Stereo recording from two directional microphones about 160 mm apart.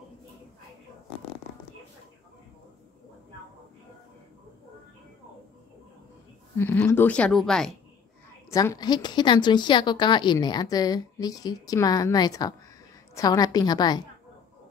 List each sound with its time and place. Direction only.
6.6 s a woman's voice: 10° left (ahead or behind)
8.5 s a woman's voice: 20° left (ahead or behind)